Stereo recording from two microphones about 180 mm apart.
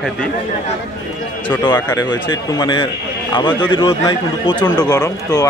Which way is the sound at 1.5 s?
25° left (ahead or behind).